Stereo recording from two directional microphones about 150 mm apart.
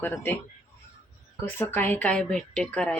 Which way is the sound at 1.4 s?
15° left (ahead or behind).